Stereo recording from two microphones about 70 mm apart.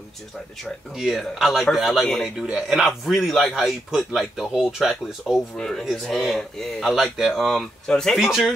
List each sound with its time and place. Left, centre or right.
0.9 s speech: centre
5.2 s speech: centre
5.9 s speech: centre